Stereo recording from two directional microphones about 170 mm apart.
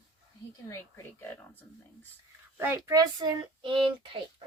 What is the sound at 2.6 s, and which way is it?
Speech, 15° right (ahead or behind).